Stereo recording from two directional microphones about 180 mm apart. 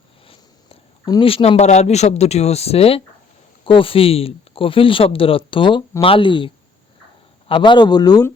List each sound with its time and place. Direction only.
0.3 s speech: 25° left (ahead or behind)